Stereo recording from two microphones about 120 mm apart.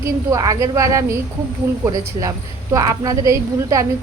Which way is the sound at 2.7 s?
30° right (ahead or behind).